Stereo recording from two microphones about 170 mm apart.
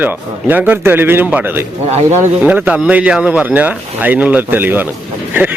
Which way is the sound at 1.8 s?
40° right (ahead or behind).